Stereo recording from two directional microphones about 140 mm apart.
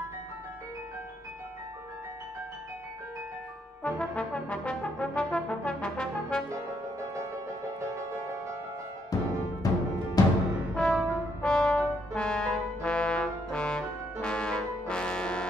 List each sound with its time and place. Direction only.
3.8 s brass instrument: 10° left (ahead or behind)
9.1 s timpani: 25° left (ahead or behind)
10.2 s music: 25° left (ahead or behind)
10.8 s brass instrument: 5° left (ahead or behind)
14.2 s trombone: 5° left (ahead or behind)